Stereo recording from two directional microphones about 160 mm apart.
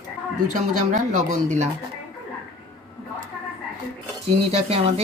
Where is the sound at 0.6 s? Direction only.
50° right (ahead or behind).